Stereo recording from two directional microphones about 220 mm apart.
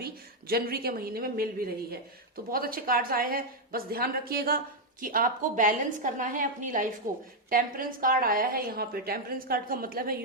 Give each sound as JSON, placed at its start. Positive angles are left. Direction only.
{"t": 0.0, "sound": "a woman's voice", "side_deg": -45}